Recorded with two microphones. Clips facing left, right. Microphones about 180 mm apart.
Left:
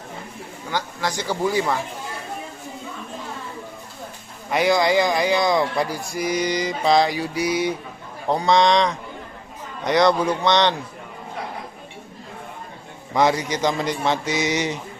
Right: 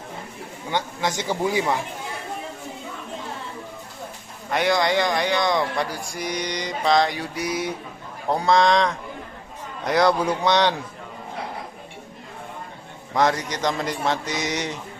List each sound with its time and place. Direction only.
0.7 s speech: 20° right (ahead or behind)
4.5 s speech: 5° left (ahead or behind)
13.1 s speech: 5° left (ahead or behind)